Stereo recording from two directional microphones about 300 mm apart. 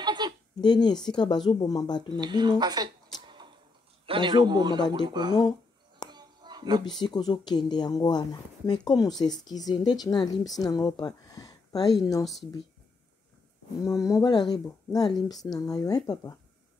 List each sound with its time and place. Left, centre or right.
0.0 s a sound: centre
0.6 s speech: centre
2.1 s a man's voice: centre
3.3 s tick-tock: centre
4.0 s a man's voice: centre
6.0 s a sound: centre
7.0 s a woman's voice: centre
13.8 s speech: centre